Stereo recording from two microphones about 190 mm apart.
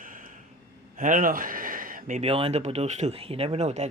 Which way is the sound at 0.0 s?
45° right (ahead or behind).